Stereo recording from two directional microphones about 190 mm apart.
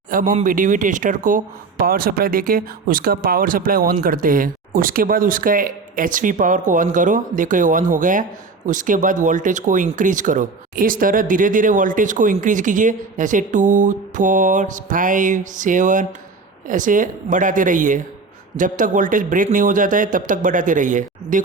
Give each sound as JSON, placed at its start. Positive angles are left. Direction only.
{"t": 0.1, "sound": "speech", "side_deg": -45}